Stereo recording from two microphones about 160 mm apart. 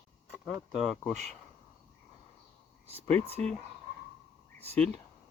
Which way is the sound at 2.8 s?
40° right (ahead or behind).